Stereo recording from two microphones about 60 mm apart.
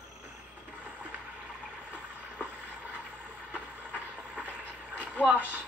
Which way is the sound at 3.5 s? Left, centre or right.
Right.